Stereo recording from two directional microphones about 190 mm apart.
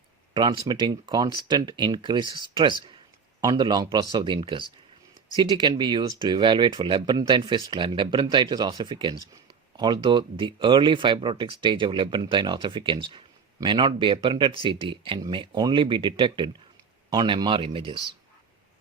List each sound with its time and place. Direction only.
0.3 s speech: 25° right (ahead or behind)